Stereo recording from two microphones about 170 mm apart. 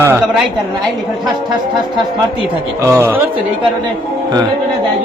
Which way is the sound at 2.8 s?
15° right (ahead or behind).